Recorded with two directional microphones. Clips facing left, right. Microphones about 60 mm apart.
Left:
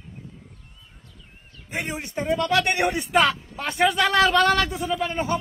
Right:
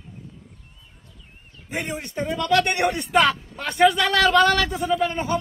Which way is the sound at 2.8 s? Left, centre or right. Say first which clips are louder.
Right 1 dB; centre.